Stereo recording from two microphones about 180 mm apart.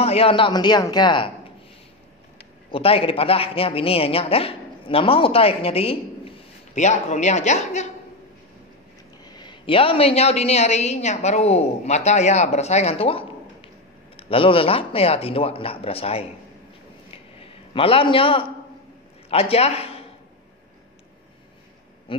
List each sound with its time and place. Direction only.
0.0 s a man's voice: 35° left (ahead or behind)
2.7 s a man's voice: 30° left (ahead or behind)
9.2 s a man's voice: 25° left (ahead or behind)
17.1 s a sound: 30° left (ahead or behind)
19.2 s a man's voice: 35° left (ahead or behind)